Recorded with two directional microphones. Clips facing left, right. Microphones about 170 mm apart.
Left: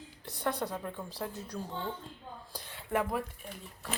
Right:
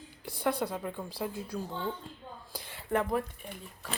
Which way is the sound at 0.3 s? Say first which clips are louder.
Right 3 dB; 10° right (ahead or behind).